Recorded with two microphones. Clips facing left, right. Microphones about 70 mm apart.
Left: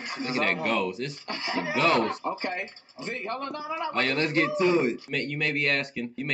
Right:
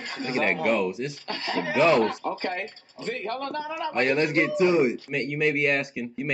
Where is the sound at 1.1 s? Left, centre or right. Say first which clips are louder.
Right 2 dB; left.